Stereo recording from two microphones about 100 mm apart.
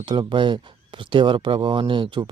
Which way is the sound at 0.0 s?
50° right (ahead or behind).